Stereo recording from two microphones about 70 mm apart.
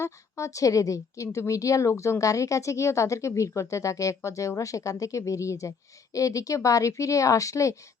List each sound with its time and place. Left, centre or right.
0.0 s a woman's voice: left